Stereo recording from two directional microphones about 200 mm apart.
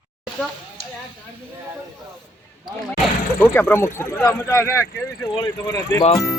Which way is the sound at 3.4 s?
10° left (ahead or behind).